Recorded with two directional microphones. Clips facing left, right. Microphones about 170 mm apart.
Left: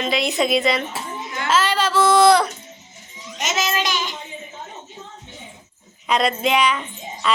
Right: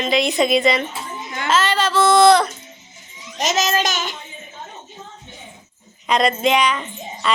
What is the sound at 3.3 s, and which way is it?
Speech, 40° right (ahead or behind).